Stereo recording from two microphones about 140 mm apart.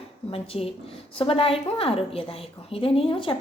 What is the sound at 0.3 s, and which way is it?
A woman's voice, 45° left (ahead or behind).